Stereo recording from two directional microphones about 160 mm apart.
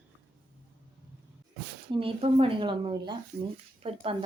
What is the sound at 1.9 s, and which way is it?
Speech, 35° right (ahead or behind).